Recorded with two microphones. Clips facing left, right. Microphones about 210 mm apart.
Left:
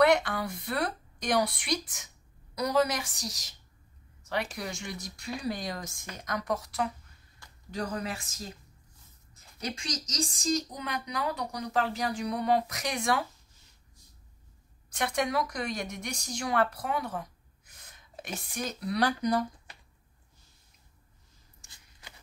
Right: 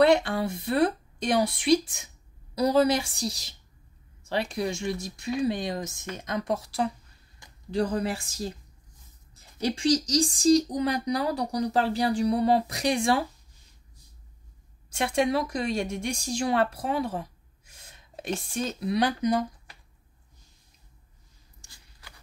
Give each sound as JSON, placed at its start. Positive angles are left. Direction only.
{"t": 0.0, "sound": "speech", "side_deg": -30}
{"t": 4.6, "sound": "speech", "side_deg": -25}
{"t": 7.4, "sound": "a sound", "side_deg": -15}
{"t": 7.7, "sound": "a woman's voice", "side_deg": -30}
{"t": 14.9, "sound": "speech", "side_deg": -25}
{"t": 21.6, "sound": "a sound", "side_deg": 20}